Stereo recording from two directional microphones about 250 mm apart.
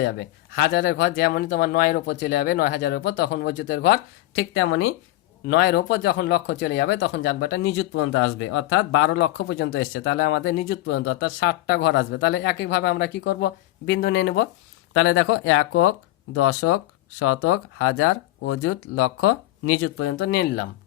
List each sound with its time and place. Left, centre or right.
0.0 s speech: left
5.5 s speech: left
9.6 s speech: left